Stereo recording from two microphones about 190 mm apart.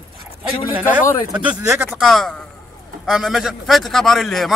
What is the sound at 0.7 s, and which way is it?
A man's voice, 10° right (ahead or behind).